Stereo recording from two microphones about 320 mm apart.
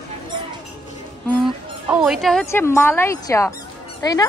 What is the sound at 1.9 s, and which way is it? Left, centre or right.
Speech, centre.